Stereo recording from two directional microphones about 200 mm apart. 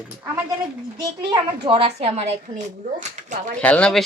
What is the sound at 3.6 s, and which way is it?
Speech, 5° left (ahead or behind).